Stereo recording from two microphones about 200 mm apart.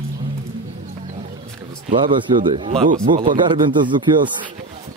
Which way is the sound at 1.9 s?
40° right (ahead or behind).